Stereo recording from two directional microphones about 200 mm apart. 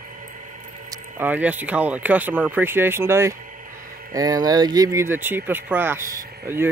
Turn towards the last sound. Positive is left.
turn(degrees=-10)  # may be behind; listen again after turning